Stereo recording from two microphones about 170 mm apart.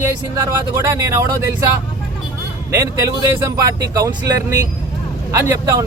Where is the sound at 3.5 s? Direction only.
20° right (ahead or behind).